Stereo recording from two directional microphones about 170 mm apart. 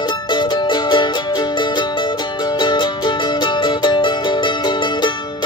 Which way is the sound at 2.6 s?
25° left (ahead or behind).